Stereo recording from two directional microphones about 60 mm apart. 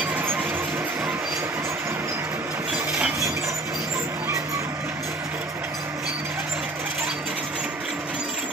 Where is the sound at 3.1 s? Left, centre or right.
Right.